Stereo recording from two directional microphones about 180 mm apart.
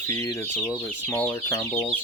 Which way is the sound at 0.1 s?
20° left (ahead or behind).